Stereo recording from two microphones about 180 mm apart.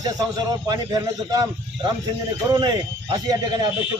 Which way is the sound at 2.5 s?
25° right (ahead or behind).